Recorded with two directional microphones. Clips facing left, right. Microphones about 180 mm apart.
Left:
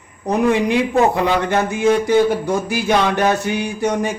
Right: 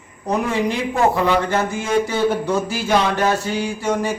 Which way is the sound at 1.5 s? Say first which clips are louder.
Left 4 dB; 20° left (ahead or behind).